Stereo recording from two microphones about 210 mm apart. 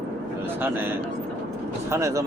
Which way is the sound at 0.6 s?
10° right (ahead or behind).